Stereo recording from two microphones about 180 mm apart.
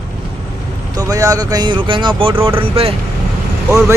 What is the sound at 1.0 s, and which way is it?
A man's voice, 20° right (ahead or behind).